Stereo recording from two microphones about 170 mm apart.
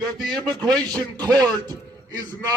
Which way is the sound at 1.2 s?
25° right (ahead or behind).